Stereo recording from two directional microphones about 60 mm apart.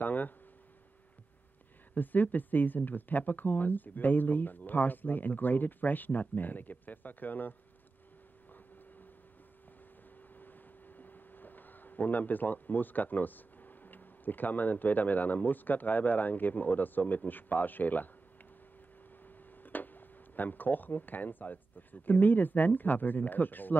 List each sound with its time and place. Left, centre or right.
0.0 s a sound: left
2.0 s speech: left
10.3 s speech: left
19.2 s speech: left